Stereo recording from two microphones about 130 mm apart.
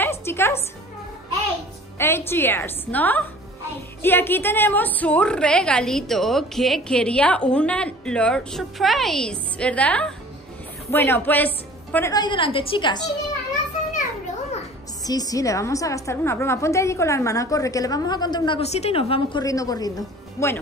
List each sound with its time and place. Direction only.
0.0 s music: 20° left (ahead or behind)
2.0 s a woman's voice: 20° left (ahead or behind)
12.1 s a woman's voice: 35° left (ahead or behind)
15.0 s a woman's voice: 30° left (ahead or behind)
18.6 s a woman's voice: 55° left (ahead or behind)
19.4 s a woman's voice: 25° left (ahead or behind)